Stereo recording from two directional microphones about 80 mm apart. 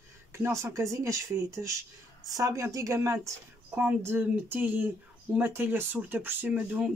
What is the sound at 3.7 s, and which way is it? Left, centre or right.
Speech, right.